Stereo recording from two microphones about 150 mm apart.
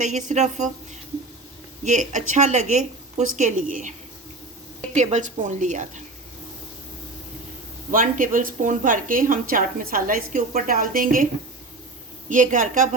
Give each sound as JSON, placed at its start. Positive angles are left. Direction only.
{"t": 0.0, "sound": "a woman's voice", "side_deg": -55}
{"t": 1.8, "sound": "speech", "side_deg": -55}
{"t": 4.9, "sound": "speech", "side_deg": -55}
{"t": 7.9, "sound": "speech", "side_deg": -65}
{"t": 12.3, "sound": "speech", "side_deg": -60}